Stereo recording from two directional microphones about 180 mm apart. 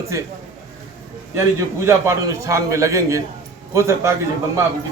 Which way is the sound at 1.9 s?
15° right (ahead or behind).